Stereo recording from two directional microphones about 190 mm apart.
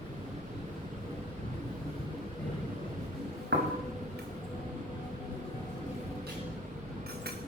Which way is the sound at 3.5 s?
55° right (ahead or behind).